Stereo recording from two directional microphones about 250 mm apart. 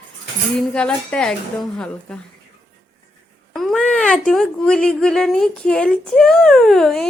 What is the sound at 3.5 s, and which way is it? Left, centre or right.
Speech, centre.